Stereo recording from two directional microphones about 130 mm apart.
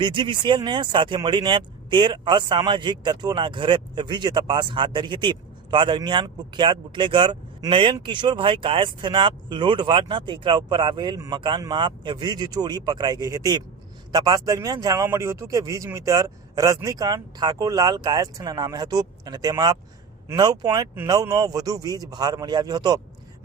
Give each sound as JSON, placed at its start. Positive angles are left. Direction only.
{"t": 0.0, "sound": "speech", "side_deg": -40}